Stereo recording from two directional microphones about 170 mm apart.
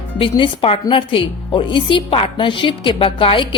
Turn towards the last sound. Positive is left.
turn(degrees=30)  # may be behind; listen again after turning